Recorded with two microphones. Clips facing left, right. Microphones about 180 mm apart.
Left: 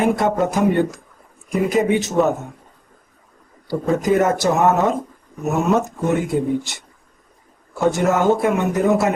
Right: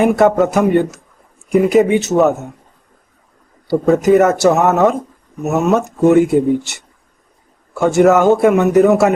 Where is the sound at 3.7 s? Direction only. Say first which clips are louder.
Right 7 dB; 70° right (ahead or behind).